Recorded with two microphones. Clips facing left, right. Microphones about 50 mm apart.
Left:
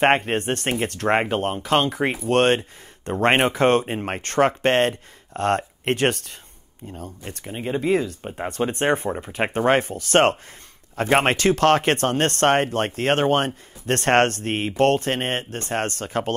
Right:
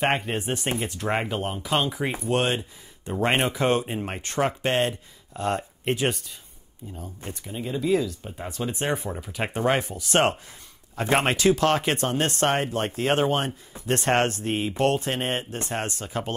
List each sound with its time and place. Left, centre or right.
0.0 s speech: left
0.4 s speech: left
2.2 s speech: left
7.4 s speech: left
9.1 s speech: left